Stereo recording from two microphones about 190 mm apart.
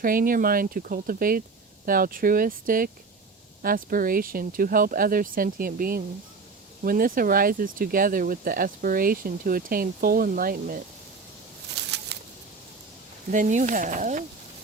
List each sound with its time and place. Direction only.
0.0 s speech: 50° right (ahead or behind)
11.7 s a sound: 65° right (ahead or behind)
13.3 s speech: 40° right (ahead or behind)